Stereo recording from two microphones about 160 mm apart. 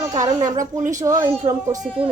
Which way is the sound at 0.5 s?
50° right (ahead or behind).